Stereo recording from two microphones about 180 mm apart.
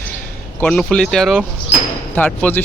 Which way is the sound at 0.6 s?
5° left (ahead or behind).